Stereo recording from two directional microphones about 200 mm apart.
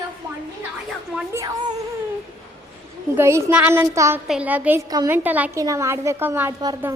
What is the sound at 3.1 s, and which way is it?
A woman's voice, 10° right (ahead or behind).